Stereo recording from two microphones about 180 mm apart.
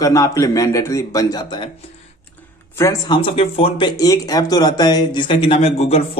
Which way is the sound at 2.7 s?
20° left (ahead or behind).